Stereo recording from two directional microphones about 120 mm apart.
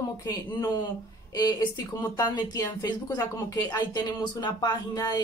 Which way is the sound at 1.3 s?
35° left (ahead or behind).